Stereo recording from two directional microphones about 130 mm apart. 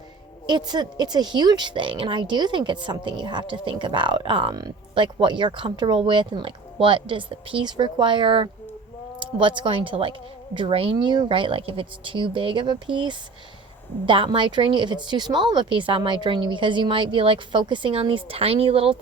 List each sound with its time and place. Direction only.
0.4 s a woman's voice: 35° right (ahead or behind)
10.9 s a woman's voice: 35° right (ahead or behind)